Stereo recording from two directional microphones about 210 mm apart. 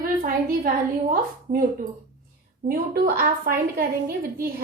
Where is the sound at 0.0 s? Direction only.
40° right (ahead or behind).